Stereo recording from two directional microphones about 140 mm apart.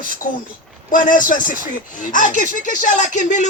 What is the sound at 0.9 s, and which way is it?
A man's voice, 75° left (ahead or behind).